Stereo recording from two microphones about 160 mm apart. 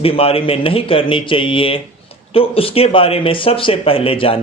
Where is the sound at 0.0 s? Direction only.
35° left (ahead or behind).